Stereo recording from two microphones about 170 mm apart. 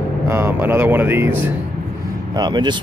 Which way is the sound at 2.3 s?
25° right (ahead or behind).